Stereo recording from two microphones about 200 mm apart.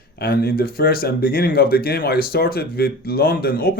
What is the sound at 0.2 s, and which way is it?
Speech, 50° left (ahead or behind).